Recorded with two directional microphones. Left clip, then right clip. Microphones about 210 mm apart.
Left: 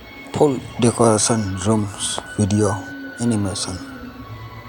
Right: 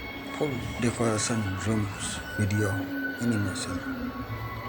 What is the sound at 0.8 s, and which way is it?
Speech, 20° left (ahead or behind).